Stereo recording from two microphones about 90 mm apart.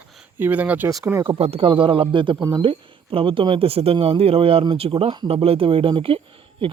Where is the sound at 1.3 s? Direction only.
85° right; by 2.3 s 65° right (ahead or behind).